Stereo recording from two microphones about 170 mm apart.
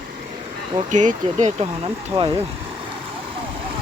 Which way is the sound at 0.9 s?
45° right (ahead or behind).